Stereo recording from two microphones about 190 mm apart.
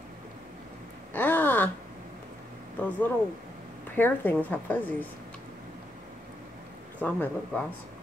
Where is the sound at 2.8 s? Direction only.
10° left (ahead or behind).